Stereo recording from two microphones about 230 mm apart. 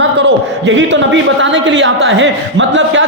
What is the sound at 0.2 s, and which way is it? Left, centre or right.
A man's voice, right.